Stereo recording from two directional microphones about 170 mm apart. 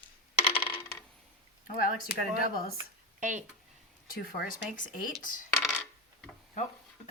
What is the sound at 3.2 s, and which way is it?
Speech, 50° right (ahead or behind).